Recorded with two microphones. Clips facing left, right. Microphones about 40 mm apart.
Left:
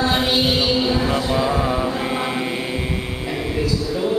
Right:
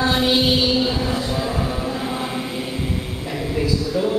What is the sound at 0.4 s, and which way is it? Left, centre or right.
Chant, centre.